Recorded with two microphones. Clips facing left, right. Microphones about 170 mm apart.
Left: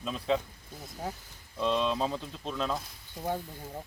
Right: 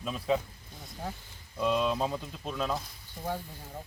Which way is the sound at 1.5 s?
5° right (ahead or behind).